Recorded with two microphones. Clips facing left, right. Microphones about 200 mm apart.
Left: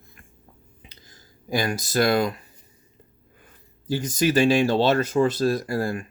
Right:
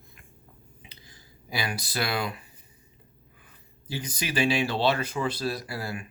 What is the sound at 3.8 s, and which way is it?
Speech, 45° left (ahead or behind).